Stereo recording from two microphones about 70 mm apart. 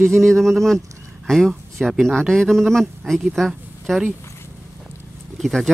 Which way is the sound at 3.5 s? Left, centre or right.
Centre.